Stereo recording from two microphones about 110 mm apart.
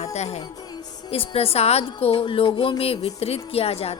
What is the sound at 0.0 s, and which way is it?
Music, 80° left.